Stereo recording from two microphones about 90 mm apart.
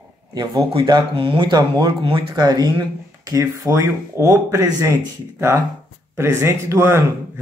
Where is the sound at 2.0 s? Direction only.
75° right (ahead or behind).